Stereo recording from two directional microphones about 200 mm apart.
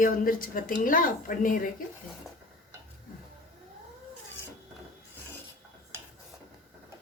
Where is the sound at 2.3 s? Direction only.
Centre (ahead or behind).